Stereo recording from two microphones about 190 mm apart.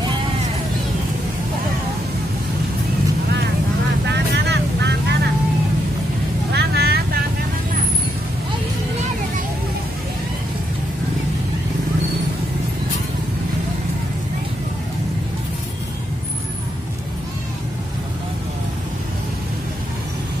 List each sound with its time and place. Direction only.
4.1 s vehicle: 60° right (ahead or behind)
6.5 s vehicle: 60° right (ahead or behind)